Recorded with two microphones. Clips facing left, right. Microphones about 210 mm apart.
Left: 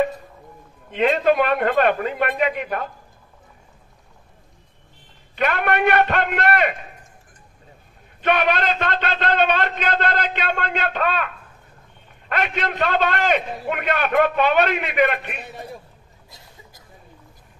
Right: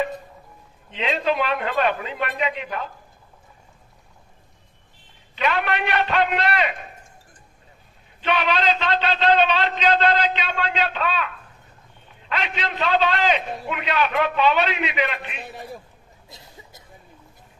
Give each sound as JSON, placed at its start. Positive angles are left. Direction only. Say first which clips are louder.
{"t": 0.8, "sound": "a man's voice", "louder": "left 6 dB", "side_deg": 55}
{"t": 5.3, "sound": "a man's voice", "louder": "left 2 dB", "side_deg": 50}
{"t": 8.2, "sound": "a man's voice", "louder": "left 3 dB", "side_deg": 50}
{"t": 15.5, "sound": "a man's voice", "louder": "left 1 dB", "side_deg": 0}
{"t": 16.3, "sound": "a sound", "louder": "right 3 dB", "side_deg": -25}